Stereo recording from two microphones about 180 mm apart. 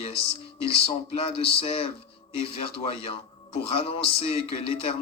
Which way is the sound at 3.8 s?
35° left (ahead or behind).